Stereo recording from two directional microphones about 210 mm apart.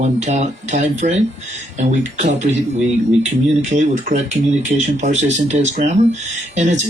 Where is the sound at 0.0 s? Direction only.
35° right (ahead or behind).